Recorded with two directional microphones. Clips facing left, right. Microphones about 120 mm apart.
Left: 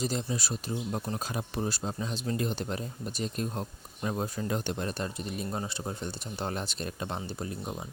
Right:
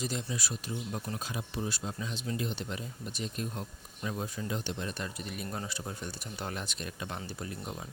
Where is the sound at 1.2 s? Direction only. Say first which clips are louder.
Left 4 dB; 45° left (ahead or behind).